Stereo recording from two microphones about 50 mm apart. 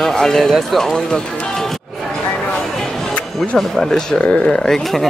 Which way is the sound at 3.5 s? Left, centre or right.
Centre.